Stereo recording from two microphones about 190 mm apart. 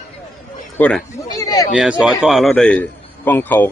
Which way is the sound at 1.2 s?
20° left (ahead or behind).